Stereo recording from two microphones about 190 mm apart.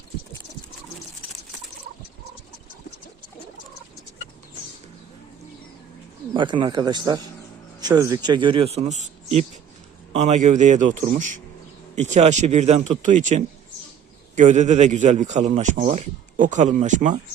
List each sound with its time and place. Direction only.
6.3 s a man's voice: 25° right (ahead or behind); by 17.2 s 40° right (ahead or behind)